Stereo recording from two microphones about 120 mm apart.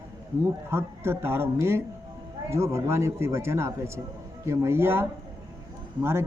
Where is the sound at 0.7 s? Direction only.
20° right (ahead or behind).